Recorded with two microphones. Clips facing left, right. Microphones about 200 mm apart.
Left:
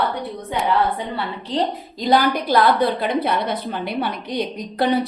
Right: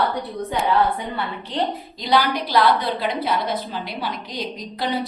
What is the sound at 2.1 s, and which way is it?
A woman's voice, 50° left (ahead or behind).